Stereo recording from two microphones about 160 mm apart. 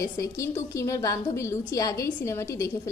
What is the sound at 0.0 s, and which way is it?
A woman's voice, 20° left (ahead or behind).